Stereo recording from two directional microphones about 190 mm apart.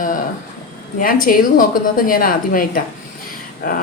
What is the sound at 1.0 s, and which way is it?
A woman's voice, 50° left (ahead or behind).